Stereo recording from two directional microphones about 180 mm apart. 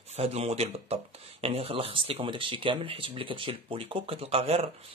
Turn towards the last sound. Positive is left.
turn(degrees=-35)  # may be behind; listen again after turning